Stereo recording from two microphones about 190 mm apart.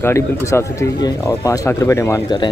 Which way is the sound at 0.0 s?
15° left (ahead or behind).